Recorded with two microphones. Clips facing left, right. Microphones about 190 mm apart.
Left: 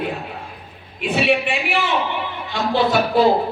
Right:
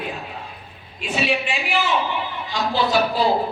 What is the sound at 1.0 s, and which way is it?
Speech, 60° left (ahead or behind).